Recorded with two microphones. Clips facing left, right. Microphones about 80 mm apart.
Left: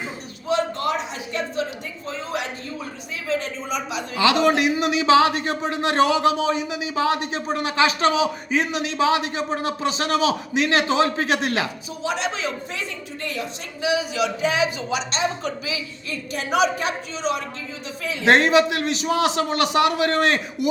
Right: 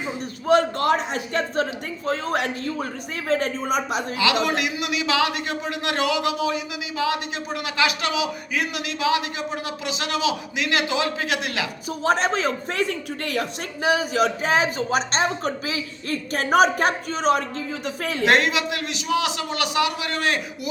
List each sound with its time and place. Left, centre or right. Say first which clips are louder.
0.4 s a sound: right 4 dB; right
2.0 s a man's voice: right 5 dB; right
4.2 s a man's voice: left 5 dB; left
11.9 s speech: right 5 dB; right
18.3 s a man's voice: left 5 dB; left